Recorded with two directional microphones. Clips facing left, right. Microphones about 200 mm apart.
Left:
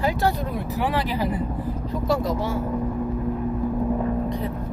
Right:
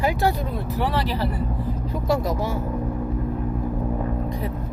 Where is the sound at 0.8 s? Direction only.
15° left (ahead or behind).